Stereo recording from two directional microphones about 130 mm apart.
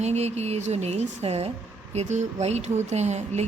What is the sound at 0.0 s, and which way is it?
Speech, 60° right (ahead or behind).